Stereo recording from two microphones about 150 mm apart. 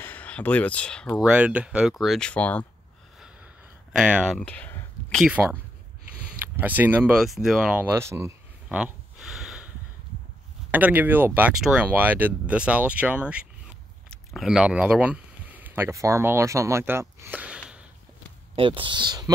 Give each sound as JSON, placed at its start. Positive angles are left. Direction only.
{"t": 0.0, "sound": "speech", "side_deg": 10}
{"t": 1.2, "sound": "speech", "side_deg": -10}
{"t": 3.9, "sound": "speech", "side_deg": -5}
{"t": 4.4, "sound": "a sound", "side_deg": 10}
{"t": 5.2, "sound": "speech", "side_deg": -10}
{"t": 7.9, "sound": "speech", "side_deg": -20}
{"t": 8.6, "sound": "a sound", "side_deg": -5}
{"t": 10.7, "sound": "speech", "side_deg": -10}
{"t": 18.6, "sound": "speech", "side_deg": -35}